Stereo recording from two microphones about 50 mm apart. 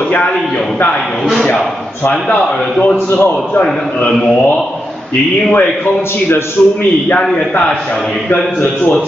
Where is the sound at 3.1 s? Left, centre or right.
Left.